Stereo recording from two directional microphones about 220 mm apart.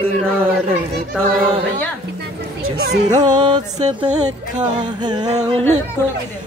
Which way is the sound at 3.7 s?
30° right (ahead or behind).